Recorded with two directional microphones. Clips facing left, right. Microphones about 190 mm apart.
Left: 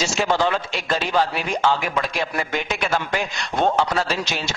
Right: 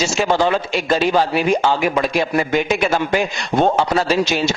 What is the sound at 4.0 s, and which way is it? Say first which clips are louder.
Speech: right 7 dB; 5° right (ahead or behind).